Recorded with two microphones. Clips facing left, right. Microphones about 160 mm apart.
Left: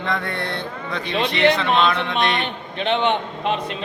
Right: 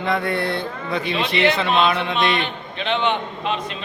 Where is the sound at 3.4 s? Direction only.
60° left (ahead or behind).